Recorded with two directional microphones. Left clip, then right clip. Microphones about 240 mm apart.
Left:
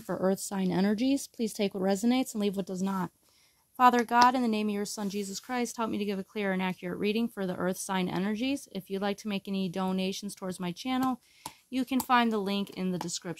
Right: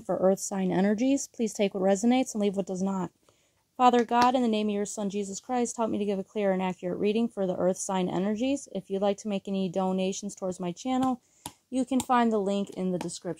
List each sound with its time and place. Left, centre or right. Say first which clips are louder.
0.0 s speech: right 5 dB; left